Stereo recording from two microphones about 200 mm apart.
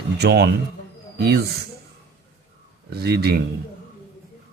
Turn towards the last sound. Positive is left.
turn(degrees=-55)  # may be behind; listen again after turning